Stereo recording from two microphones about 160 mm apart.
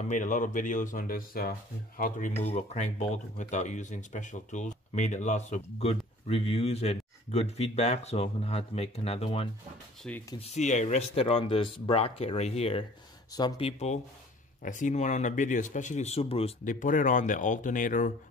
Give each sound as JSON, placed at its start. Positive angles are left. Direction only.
{"t": 0.1, "sound": "speech", "side_deg": 55}
{"t": 2.4, "sound": "speech", "side_deg": 45}
{"t": 13.3, "sound": "speech", "side_deg": 25}
{"t": 13.6, "sound": "speech", "side_deg": 40}
{"t": 14.6, "sound": "speech", "side_deg": 50}
{"t": 16.6, "sound": "speech", "side_deg": 55}